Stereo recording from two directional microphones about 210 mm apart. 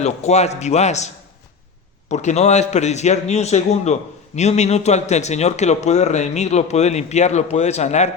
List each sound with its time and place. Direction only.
0.0 s speech: 30° left (ahead or behind)